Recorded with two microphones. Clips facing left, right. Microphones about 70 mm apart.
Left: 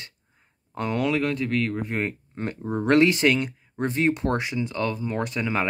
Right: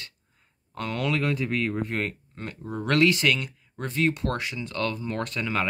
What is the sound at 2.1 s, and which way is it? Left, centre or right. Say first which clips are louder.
Speech: left 5 dB; left.